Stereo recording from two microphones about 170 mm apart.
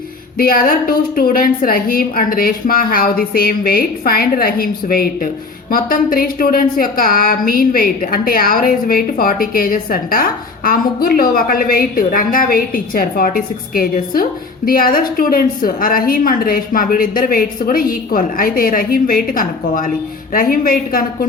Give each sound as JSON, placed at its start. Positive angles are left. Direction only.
{"t": 0.3, "sound": "a woman's voice", "side_deg": 55}